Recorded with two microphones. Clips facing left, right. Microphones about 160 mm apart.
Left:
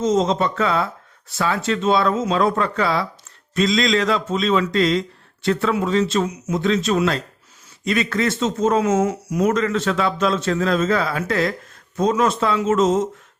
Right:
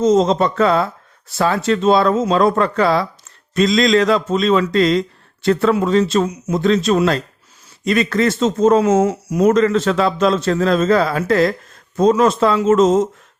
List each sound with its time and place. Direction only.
0.0 s speech: 35° right (ahead or behind)